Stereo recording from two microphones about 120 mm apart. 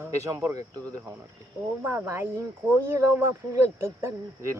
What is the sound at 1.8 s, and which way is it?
Speech, 20° right (ahead or behind).